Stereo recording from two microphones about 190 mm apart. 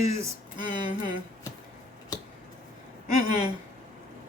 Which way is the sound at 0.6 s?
40° left (ahead or behind).